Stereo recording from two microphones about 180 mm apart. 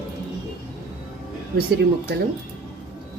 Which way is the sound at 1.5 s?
60° right (ahead or behind).